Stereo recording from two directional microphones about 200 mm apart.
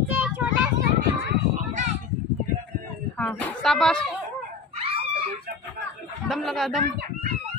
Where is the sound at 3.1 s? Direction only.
5° left (ahead or behind).